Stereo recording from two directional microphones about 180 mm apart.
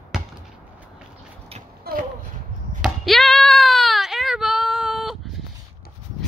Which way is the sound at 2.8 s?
Centre (ahead or behind).